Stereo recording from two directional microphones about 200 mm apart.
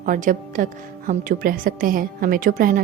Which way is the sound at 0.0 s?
40° right (ahead or behind).